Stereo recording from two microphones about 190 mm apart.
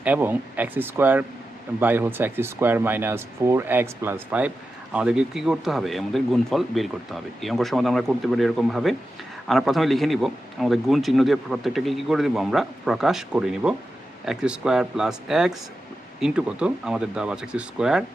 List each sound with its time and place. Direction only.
0.0 s a man's voice: 10° right (ahead or behind)